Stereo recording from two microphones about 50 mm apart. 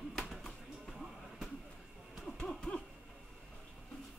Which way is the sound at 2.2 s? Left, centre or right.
Centre.